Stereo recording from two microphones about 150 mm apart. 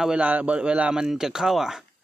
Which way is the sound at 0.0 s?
5° right (ahead or behind).